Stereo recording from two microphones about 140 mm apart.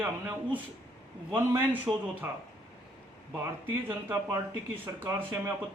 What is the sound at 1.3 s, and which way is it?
Speech, 15° right (ahead or behind).